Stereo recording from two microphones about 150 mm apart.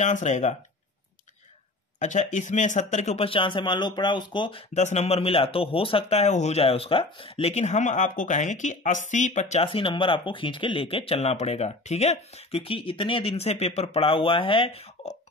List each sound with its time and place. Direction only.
0.0 s speech: 55° left (ahead or behind)
2.0 s speech: 55° left (ahead or behind); by 15.1 s 40° left (ahead or behind)